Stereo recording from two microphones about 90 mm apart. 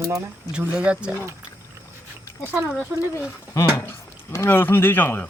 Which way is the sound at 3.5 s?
35° left (ahead or behind).